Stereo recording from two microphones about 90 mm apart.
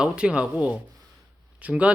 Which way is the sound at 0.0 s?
10° right (ahead or behind).